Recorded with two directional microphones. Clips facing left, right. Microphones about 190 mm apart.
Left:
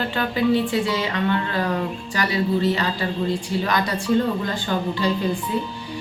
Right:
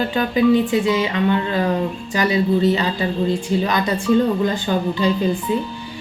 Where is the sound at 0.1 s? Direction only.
15° right (ahead or behind).